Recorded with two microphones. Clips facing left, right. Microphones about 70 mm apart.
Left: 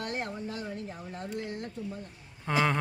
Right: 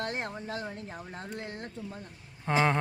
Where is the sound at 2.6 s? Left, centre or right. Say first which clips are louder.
Right 1 dB; centre.